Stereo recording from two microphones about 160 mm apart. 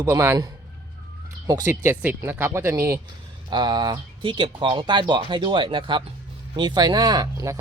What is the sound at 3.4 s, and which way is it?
Speech, 25° right (ahead or behind).